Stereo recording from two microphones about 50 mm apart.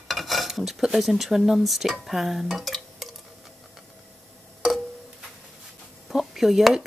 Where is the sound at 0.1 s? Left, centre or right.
Centre.